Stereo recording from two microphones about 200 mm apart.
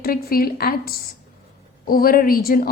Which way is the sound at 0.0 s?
50° left (ahead or behind).